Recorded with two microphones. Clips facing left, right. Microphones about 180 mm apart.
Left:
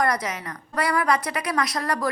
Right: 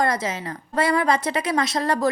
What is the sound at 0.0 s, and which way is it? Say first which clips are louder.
A woman's voice: right 1 dB; 25° right (ahead or behind).